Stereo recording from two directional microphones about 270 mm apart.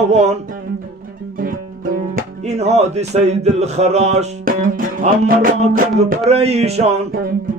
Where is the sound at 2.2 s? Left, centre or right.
Right.